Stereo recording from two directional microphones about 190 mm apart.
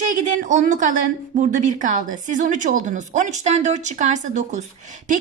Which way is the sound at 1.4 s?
40° right (ahead or behind).